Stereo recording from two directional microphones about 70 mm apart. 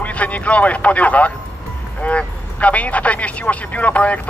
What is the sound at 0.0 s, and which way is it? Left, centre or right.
Speech, centre.